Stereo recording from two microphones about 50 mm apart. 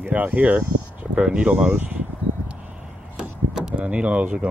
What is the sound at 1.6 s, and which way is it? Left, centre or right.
Speech, right.